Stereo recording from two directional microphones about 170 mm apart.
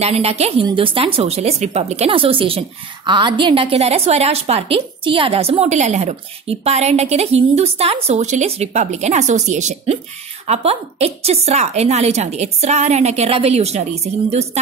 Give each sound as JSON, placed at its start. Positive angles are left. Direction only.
{"t": 0.0, "sound": "a woman's voice", "side_deg": -35}